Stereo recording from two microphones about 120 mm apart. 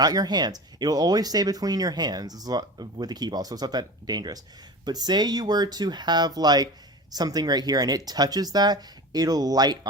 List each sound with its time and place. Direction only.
0.0 s speech: 35° right (ahead or behind)